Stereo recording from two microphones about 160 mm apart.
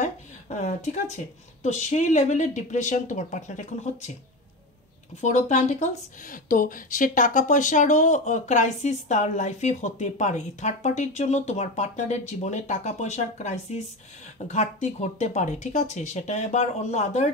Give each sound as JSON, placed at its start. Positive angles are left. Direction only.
{"t": 0.0, "sound": "a sound", "side_deg": 50}
{"t": 1.6, "sound": "speech", "side_deg": 45}
{"t": 5.2, "sound": "speech", "side_deg": 45}